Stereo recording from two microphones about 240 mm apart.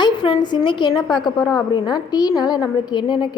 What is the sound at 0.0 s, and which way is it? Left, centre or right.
A woman's voice, centre.